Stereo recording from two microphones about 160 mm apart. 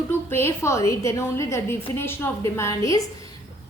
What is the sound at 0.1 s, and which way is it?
A woman's voice, 15° left (ahead or behind).